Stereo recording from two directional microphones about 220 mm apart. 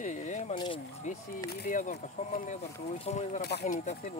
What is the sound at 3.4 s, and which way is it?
Speech, 50° left (ahead or behind).